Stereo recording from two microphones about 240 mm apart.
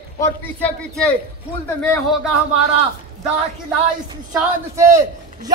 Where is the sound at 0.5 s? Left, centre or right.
Centre.